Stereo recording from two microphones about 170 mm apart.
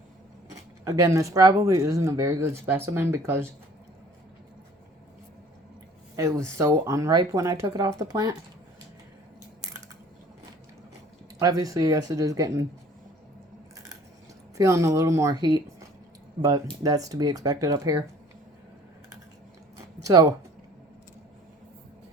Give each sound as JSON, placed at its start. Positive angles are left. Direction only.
{"t": 0.5, "sound": "speech", "side_deg": -20}
{"t": 6.1, "sound": "speech", "side_deg": -20}
{"t": 11.3, "sound": "speech", "side_deg": -20}
{"t": 14.6, "sound": "speech", "side_deg": -20}
{"t": 20.1, "sound": "speech", "side_deg": -20}